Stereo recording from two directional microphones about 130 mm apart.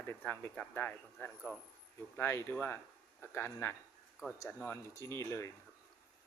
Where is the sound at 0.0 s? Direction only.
15° left (ahead or behind).